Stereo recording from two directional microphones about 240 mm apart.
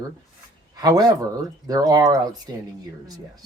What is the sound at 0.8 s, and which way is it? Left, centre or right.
Speech, centre.